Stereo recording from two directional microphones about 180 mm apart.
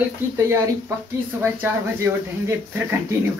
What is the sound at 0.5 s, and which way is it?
Speech, 15° right (ahead or behind).